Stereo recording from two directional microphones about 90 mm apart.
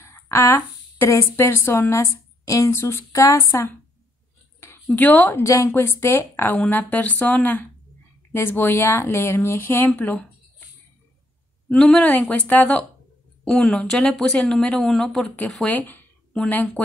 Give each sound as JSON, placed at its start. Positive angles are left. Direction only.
{"t": 0.0, "sound": "speech", "side_deg": 30}
{"t": 4.9, "sound": "speech", "side_deg": 20}
{"t": 11.7, "sound": "speech", "side_deg": 10}
{"t": 15.6, "sound": "speech", "side_deg": 20}